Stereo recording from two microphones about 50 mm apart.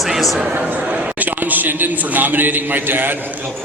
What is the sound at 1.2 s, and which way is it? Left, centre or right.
A man's voice, right.